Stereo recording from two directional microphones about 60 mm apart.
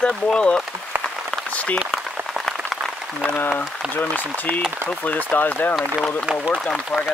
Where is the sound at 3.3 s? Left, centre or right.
Left.